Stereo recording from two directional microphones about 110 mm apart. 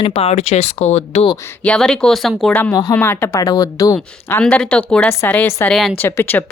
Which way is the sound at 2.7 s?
30° left (ahead or behind).